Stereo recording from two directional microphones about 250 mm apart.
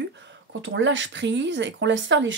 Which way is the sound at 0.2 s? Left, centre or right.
Right.